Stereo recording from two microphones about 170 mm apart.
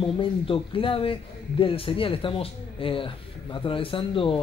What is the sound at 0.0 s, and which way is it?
Speech, 30° left (ahead or behind).